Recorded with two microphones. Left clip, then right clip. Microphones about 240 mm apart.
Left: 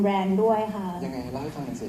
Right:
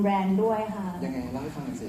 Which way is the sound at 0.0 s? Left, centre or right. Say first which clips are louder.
Left 2 dB; left.